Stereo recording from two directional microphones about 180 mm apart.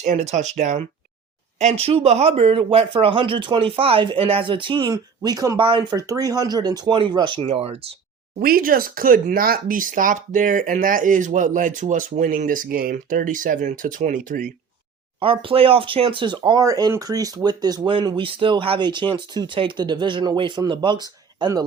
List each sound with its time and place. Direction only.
0.0 s speech: 40° right (ahead or behind)
8.4 s speech: 55° right (ahead or behind)
15.2 s speech: 30° right (ahead or behind)